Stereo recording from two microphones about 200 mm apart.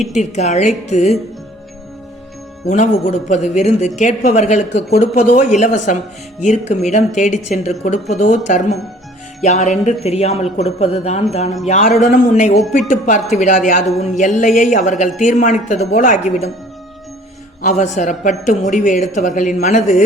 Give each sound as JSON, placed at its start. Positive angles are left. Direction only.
{"t": 0.1, "sound": "a woman's voice", "side_deg": 35}
{"t": 2.6, "sound": "a woman's voice", "side_deg": 35}
{"t": 17.6, "sound": "a woman's voice", "side_deg": 35}